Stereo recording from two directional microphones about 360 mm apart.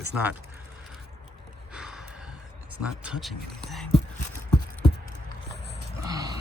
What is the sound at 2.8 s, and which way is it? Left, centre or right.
Speech, centre.